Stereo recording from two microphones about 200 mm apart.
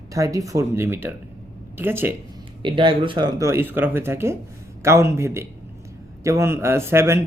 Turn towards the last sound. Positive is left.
turn(degrees=-10)  # may be behind; listen again after turning